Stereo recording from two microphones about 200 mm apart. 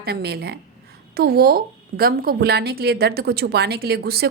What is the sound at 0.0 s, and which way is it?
A woman's voice, 55° right (ahead or behind).